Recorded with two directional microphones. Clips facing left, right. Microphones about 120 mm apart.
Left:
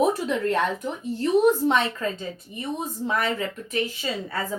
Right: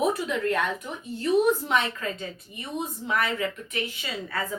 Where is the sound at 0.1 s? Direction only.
30° left (ahead or behind).